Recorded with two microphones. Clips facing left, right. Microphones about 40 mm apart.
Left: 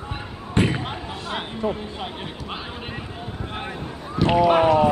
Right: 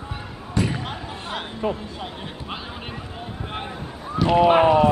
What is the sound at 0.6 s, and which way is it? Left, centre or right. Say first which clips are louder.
Basketball bounce: left 3 dB; left.